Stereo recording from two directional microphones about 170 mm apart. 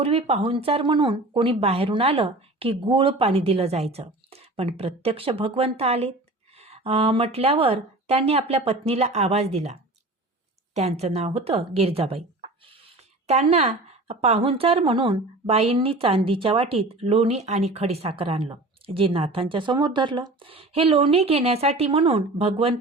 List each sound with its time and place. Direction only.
0.0 s a woman's voice: 40° right (ahead or behind)
10.8 s a woman's voice: 40° right (ahead or behind)